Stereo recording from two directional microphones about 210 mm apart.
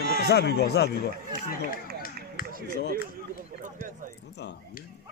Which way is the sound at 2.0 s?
45° left (ahead or behind).